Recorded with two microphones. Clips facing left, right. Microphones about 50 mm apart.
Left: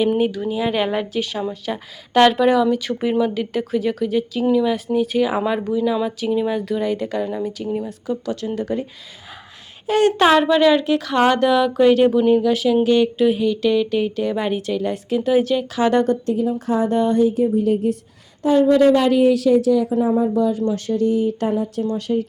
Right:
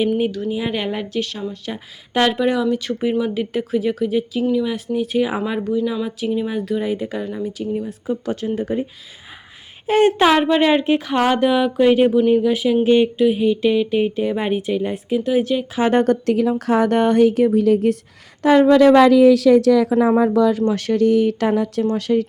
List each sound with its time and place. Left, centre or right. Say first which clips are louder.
0.3 s speech: even; centre
0.5 s speech: left 3 dB; centre
7.9 s speech: right 1 dB; centre
8.2 s speech: right 2 dB; right
9.8 s speech: right 1 dB; right
13.1 s speech: right 1 dB; centre
13.4 s speech: right 1 dB; centre
15.2 s speech: left 2 dB; centre
15.7 s speech: right 1 dB; right
16.0 s a woman's voice: right 3 dB; right